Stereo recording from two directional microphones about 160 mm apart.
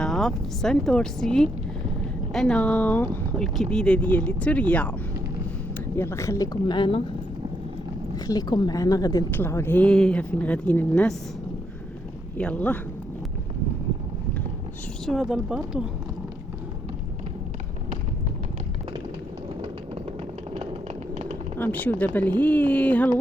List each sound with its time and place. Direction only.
0.0 s speech: centre (ahead or behind)
6.0 s a woman's voice: 15° left (ahead or behind)
8.1 s a woman's voice: 25° left (ahead or behind); by 11.1 s 10° left (ahead or behind)
12.4 s speech: 10° left (ahead or behind)
15.0 s speech: centre (ahead or behind)
21.6 s speech: 10° left (ahead or behind)